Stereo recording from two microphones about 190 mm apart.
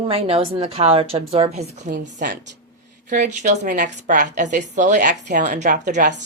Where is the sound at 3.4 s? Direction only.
40° right (ahead or behind).